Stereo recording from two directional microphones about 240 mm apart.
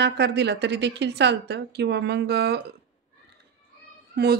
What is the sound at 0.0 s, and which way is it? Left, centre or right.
A woman's voice, right.